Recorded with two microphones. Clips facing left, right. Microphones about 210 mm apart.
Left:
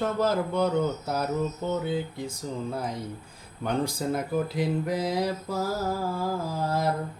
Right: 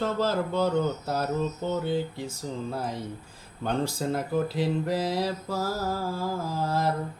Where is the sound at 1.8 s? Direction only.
15° left (ahead or behind).